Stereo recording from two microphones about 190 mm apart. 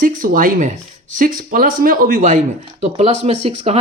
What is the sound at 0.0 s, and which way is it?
Speech, 45° right (ahead or behind).